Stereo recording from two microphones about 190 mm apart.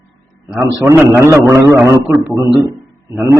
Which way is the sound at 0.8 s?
15° right (ahead or behind).